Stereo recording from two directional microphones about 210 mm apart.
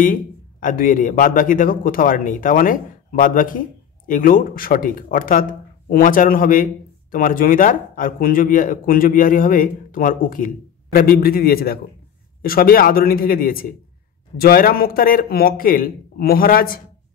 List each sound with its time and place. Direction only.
0.0 s speech: 40° left (ahead or behind)